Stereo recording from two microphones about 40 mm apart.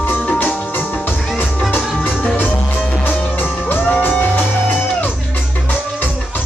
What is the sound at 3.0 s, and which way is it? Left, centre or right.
Music, left.